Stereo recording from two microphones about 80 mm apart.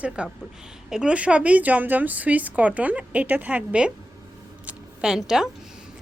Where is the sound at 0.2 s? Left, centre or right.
Centre.